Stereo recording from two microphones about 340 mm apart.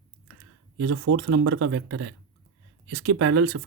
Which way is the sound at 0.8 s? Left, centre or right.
Right.